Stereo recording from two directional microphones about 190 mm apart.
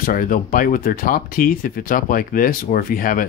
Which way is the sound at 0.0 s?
45° left (ahead or behind).